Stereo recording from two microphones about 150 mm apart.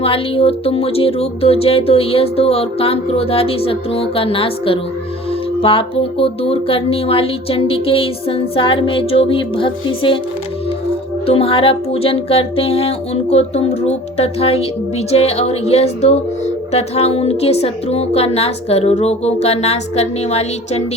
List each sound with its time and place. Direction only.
0.0 s speech: 40° left (ahead or behind)
11.3 s a woman's voice: 40° left (ahead or behind)